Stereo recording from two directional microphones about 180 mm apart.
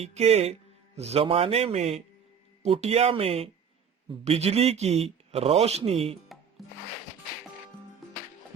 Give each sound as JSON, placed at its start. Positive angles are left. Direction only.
{"t": 0.0, "sound": "speech", "side_deg": -35}
{"t": 6.6, "sound": "music", "side_deg": 0}